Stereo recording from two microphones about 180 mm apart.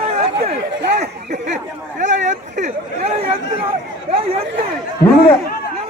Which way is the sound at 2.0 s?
45° right (ahead or behind).